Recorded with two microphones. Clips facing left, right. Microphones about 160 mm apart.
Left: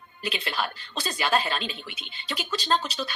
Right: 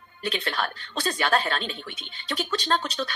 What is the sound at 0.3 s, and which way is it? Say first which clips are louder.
Speech: right 2 dB; 5° left (ahead or behind).